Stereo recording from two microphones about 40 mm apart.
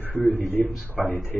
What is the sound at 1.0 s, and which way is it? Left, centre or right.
Speech, right.